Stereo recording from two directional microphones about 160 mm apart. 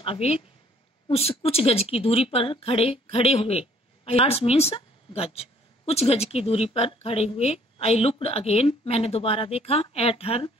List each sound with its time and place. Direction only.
0.0 s a woman's voice: 35° left (ahead or behind)